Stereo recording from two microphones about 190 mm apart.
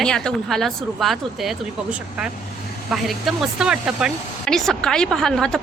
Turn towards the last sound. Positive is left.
turn(degrees=5)  # may be behind; listen again after turning